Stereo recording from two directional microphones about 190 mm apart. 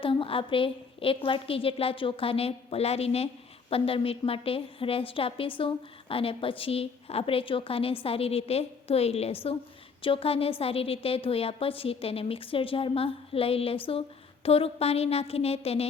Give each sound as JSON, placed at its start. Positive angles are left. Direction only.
{"t": 0.0, "sound": "a woman's voice", "side_deg": 30}